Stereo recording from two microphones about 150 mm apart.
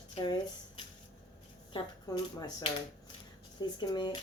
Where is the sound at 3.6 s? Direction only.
30° left (ahead or behind).